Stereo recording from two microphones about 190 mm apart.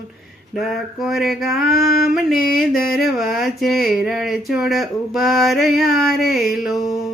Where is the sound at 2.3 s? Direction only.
50° left (ahead or behind).